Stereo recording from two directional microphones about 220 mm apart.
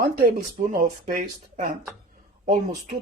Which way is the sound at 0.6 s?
35° right (ahead or behind).